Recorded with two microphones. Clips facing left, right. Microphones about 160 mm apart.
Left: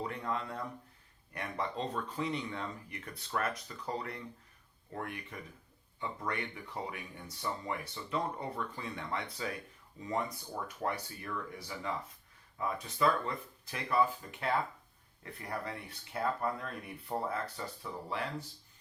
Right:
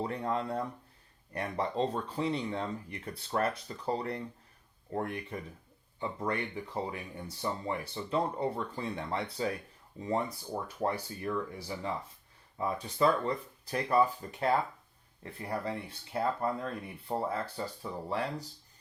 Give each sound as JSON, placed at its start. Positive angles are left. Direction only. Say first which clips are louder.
{"t": 0.0, "sound": "speech", "louder": "right 4 dB", "side_deg": -35}